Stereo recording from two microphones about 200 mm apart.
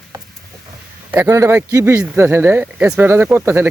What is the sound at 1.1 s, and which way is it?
Speech, 15° right (ahead or behind).